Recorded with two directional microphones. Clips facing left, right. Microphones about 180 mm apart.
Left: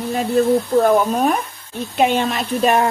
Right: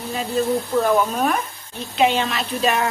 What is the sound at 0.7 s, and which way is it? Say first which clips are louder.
Speech: left 2 dB; 40° left (ahead or behind).